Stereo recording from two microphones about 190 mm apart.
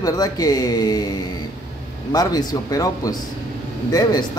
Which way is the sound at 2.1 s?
20° left (ahead or behind).